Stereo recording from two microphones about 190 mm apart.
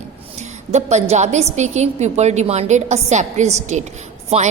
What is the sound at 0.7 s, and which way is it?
A woman's voice, 35° right (ahead or behind).